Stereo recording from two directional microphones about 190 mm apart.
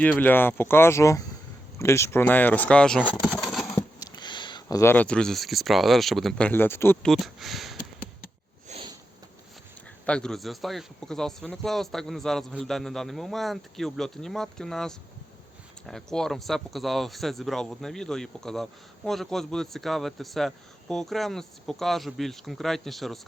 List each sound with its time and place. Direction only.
0.0 s speech: 10° left (ahead or behind)
3.7 s speech: 20° left (ahead or behind); by 7.8 s centre (ahead or behind)
8.7 s sniff: 35° right (ahead or behind)
10.1 s speech: 5° left (ahead or behind)